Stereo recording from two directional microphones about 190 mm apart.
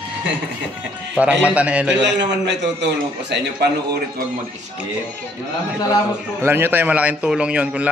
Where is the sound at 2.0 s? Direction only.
65° right (ahead or behind).